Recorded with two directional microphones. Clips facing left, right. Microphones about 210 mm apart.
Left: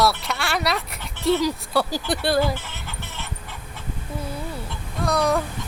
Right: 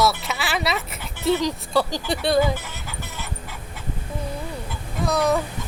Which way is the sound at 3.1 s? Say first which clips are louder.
Right 1 dB; 10° right (ahead or behind).